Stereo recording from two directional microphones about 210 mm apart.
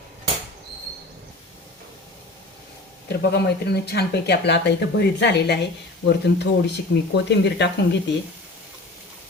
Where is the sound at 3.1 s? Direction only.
50° left (ahead or behind).